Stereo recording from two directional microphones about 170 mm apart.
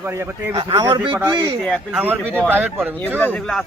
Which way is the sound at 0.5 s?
25° right (ahead or behind).